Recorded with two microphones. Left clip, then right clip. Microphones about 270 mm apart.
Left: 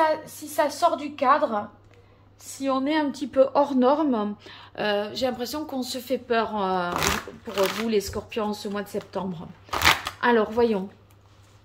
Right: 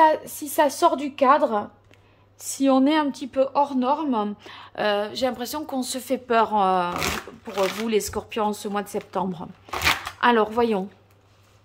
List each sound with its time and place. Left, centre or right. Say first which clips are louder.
0.0 s a woman's voice: right 5 dB; right
2.9 s a woman's voice: right 2 dB; centre